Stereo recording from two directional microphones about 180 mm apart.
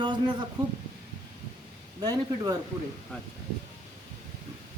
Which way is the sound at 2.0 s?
20° right (ahead or behind).